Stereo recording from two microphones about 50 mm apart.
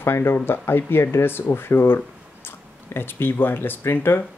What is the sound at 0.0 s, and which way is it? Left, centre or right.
Speech, left.